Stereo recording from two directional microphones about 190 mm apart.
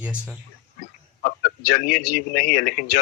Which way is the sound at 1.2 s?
50° left (ahead or behind).